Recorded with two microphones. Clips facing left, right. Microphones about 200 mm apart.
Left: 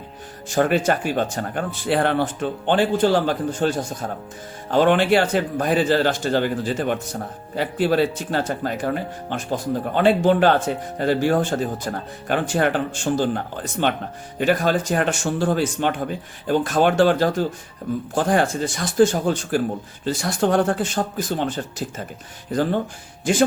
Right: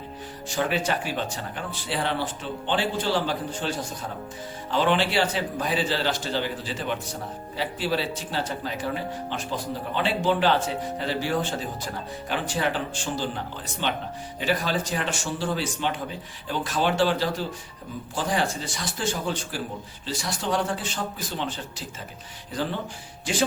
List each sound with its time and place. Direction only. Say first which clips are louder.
0.4 s speech: left 7 dB; 50° left (ahead or behind)